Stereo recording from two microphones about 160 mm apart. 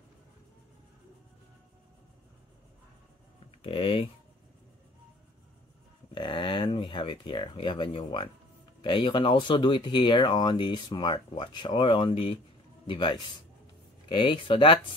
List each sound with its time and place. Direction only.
3.6 s speech: 35° left (ahead or behind)
6.1 s speech: 30° left (ahead or behind)